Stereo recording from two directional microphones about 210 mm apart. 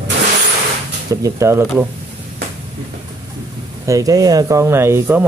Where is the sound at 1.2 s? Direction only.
15° right (ahead or behind).